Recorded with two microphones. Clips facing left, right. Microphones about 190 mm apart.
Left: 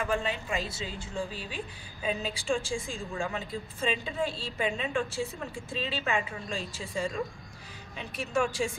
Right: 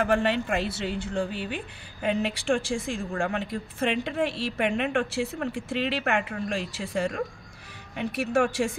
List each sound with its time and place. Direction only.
0.0 s speech: 70° right (ahead or behind)